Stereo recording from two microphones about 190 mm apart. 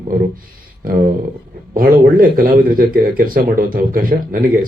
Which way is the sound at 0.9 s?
50° right (ahead or behind).